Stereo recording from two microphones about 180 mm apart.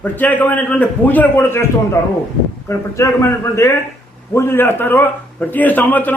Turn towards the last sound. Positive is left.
turn(degrees=10)  # may be behind; listen again after turning